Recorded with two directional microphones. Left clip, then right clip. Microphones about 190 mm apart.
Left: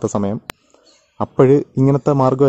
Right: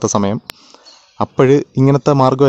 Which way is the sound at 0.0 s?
5° right (ahead or behind).